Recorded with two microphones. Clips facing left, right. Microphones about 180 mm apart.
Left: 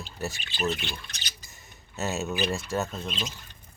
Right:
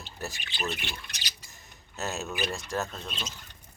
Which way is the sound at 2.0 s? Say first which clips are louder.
Left 4 dB; centre (ahead or behind).